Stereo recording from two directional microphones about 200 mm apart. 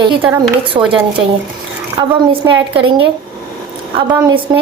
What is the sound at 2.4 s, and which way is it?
Speech, 25° right (ahead or behind).